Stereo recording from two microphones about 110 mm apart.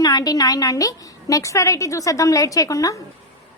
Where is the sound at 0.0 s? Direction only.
35° left (ahead or behind).